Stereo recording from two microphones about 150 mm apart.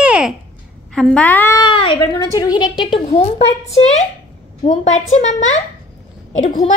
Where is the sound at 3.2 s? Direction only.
45° left (ahead or behind).